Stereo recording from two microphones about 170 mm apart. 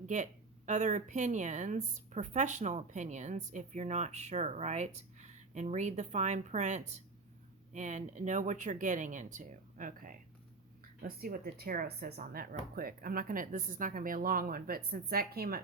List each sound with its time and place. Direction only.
0.0 s speech: 45° right (ahead or behind); by 15.6 s 65° right (ahead or behind)